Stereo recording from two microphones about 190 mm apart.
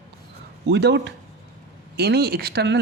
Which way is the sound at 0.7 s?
60° right (ahead or behind).